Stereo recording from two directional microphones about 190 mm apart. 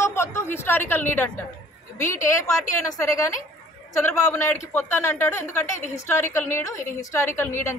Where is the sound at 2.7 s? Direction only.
15° left (ahead or behind).